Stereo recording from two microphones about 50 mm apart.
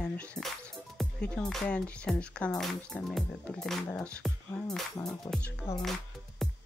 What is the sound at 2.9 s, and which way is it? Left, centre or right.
Speech, centre.